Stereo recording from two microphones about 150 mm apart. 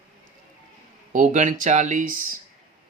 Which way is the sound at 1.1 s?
60° right (ahead or behind).